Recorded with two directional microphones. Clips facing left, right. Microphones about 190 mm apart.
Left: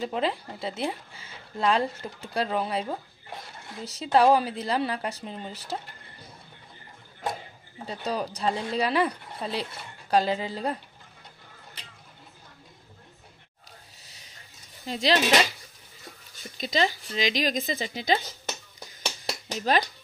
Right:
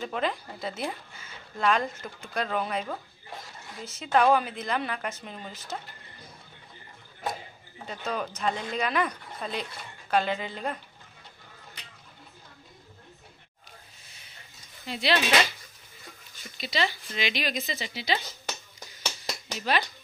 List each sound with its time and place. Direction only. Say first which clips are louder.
0.0 s speech: left 2 dB; 30° left (ahead or behind)
7.8 s speech: left 2 dB; 35° left (ahead or behind)
14.9 s speech: left 3 dB; 40° left (ahead or behind)
16.4 s speech: left 4 dB; 40° left (ahead or behind)
19.2 s a sound: left 4 dB; 40° left (ahead or behind)